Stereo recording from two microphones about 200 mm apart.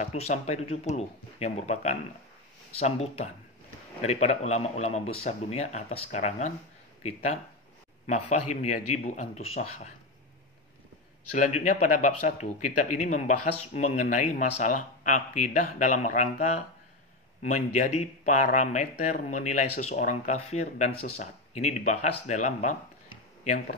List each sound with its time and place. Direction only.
0.0 s speech: 35° left (ahead or behind)
11.3 s speech: 40° left (ahead or behind)